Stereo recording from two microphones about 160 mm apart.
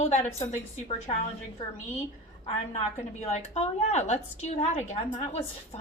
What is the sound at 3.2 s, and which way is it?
A woman's voice, 40° left (ahead or behind).